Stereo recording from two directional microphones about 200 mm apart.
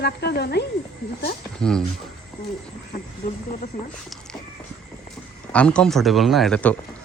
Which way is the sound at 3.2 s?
50° left (ahead or behind).